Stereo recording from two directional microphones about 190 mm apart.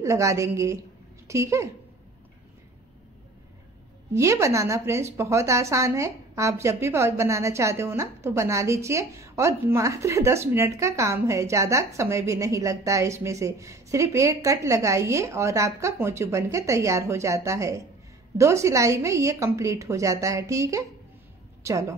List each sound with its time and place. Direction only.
0.0 s a woman's voice: 15° right (ahead or behind)
4.1 s a woman's voice: 15° right (ahead or behind)